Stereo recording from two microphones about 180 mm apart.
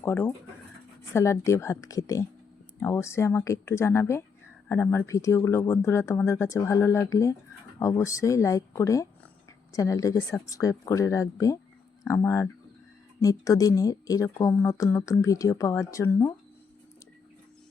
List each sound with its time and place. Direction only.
0.0 s speech: 15° left (ahead or behind)